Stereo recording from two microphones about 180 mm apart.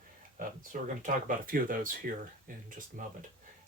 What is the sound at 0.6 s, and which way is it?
Speech, 45° right (ahead or behind).